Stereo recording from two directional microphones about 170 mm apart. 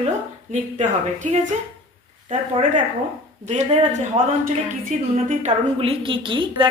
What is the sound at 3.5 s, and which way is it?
A woman's voice, 40° right (ahead or behind).